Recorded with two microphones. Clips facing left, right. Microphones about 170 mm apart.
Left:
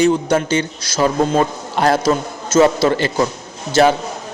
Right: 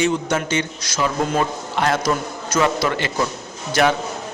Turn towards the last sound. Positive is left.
turn(degrees=35)  # may be behind; listen again after turning